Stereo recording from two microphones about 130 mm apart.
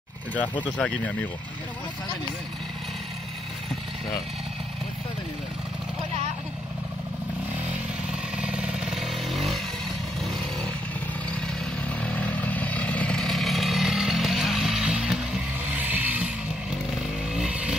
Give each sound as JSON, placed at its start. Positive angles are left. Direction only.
{"t": 0.3, "sound": "speech", "side_deg": 10}
{"t": 8.1, "sound": "motorcycle", "side_deg": -5}
{"t": 12.0, "sound": "chainsaw", "side_deg": 10}
{"t": 17.3, "sound": "vehicle", "side_deg": -5}